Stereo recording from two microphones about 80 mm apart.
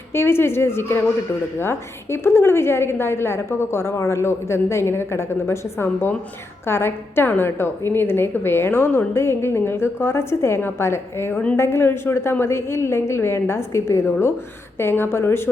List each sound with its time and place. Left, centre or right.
0.1 s a woman's voice: left